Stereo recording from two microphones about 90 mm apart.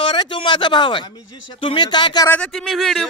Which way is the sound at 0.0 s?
70° left (ahead or behind).